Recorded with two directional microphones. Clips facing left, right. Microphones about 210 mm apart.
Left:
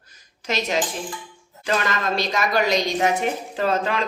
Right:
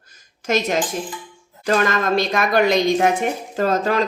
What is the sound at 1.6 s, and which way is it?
A woman's voice, 50° right (ahead or behind).